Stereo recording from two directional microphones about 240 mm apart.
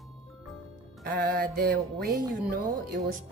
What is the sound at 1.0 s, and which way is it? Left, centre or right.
Speech, right.